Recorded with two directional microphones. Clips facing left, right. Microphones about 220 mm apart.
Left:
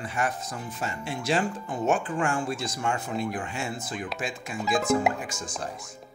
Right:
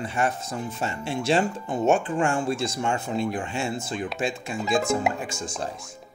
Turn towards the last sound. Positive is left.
turn(degrees=-25)  # may be behind; listen again after turning